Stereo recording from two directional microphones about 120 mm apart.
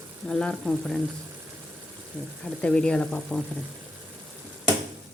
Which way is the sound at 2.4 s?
10° left (ahead or behind).